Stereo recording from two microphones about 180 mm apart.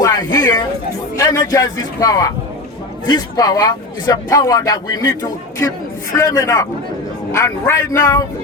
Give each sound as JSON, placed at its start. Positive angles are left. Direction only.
{"t": 0.0, "sound": "a sound", "side_deg": 20}
{"t": 1.1, "sound": "speech", "side_deg": 20}
{"t": 6.1, "sound": "a man's voice", "side_deg": 20}